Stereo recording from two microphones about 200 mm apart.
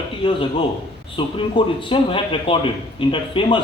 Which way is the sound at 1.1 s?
25° left (ahead or behind).